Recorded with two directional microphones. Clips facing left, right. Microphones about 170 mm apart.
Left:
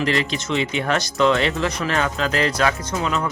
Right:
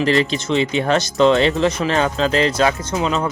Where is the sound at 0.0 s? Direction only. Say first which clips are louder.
Right 5 dB; 30° right (ahead or behind).